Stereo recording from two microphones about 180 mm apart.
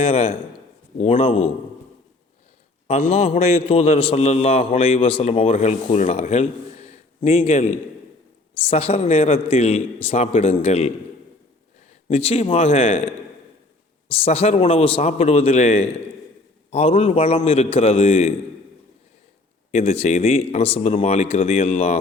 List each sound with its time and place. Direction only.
0.0 s a man's voice: 35° left (ahead or behind)
2.8 s a man's voice: 35° left (ahead or behind)
12.0 s a man's voice: 35° left (ahead or behind)
14.1 s a man's voice: 35° left (ahead or behind)
19.7 s a man's voice: 35° left (ahead or behind)